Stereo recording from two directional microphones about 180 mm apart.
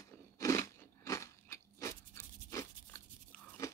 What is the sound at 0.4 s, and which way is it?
Crunch, 15° left (ahead or behind).